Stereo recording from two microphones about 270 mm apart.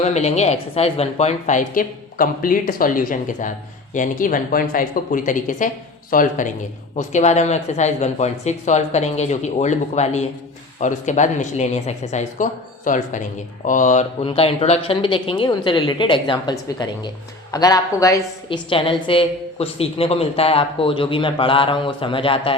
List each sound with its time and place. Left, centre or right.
0.0 s a woman's voice: left